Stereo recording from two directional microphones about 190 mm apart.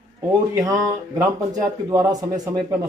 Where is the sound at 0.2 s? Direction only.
15° right (ahead or behind).